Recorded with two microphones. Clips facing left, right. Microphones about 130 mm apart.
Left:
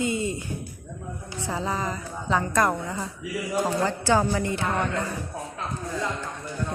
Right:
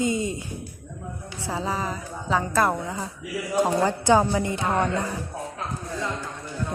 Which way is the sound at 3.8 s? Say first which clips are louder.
Right 2 dB; 15° right (ahead or behind).